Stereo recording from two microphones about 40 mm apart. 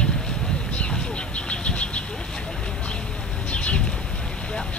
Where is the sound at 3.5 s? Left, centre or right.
Left.